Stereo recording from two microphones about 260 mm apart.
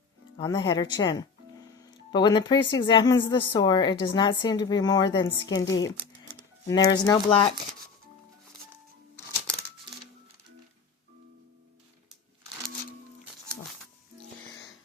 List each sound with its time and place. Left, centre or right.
0.3 s a woman's voice: centre